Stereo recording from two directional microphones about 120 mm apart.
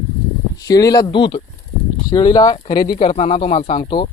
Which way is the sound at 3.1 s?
60° left (ahead or behind).